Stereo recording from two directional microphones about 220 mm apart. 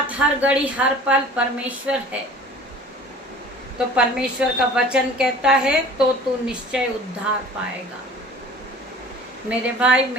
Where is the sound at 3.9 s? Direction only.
5° right (ahead or behind).